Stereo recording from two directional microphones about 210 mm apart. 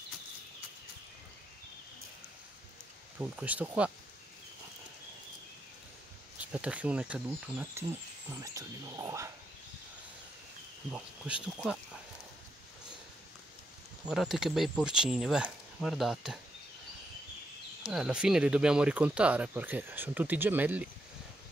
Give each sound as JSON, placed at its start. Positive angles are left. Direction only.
{"t": 3.2, "sound": "speech", "side_deg": -5}
{"t": 6.5, "sound": "speech", "side_deg": -5}
{"t": 10.9, "sound": "speech", "side_deg": -5}
{"t": 14.0, "sound": "speech", "side_deg": 0}
{"t": 17.8, "sound": "speech", "side_deg": -5}